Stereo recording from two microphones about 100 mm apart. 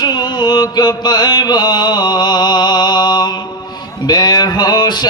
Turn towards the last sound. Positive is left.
turn(degrees=45)  # may be behind; listen again after turning